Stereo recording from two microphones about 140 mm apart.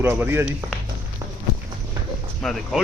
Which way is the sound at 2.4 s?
5° left (ahead or behind).